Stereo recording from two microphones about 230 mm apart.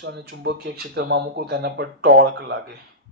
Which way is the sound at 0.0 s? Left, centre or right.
Right.